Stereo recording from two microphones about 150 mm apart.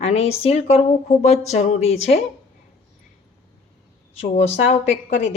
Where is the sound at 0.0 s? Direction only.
45° left (ahead or behind).